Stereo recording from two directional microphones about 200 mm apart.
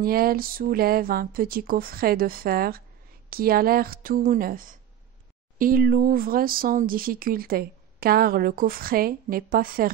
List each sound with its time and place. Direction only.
0.0 s speech: 45° right (ahead or behind)